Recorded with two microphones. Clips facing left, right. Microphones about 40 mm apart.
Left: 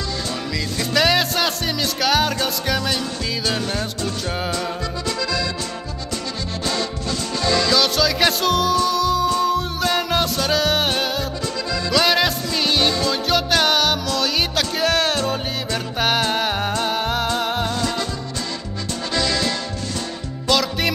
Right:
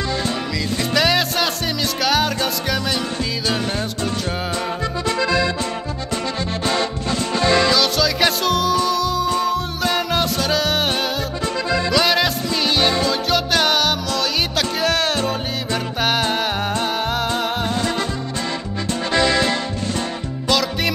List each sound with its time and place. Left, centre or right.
0.9 s music: centre
5.0 s music: right
6.6 s music: right
7.7 s music: centre
15.1 s music: centre
17.7 s music: right
19.1 s music: right
20.4 s music: centre